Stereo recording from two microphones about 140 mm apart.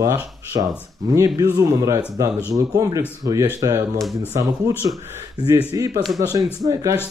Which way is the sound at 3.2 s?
20° right (ahead or behind).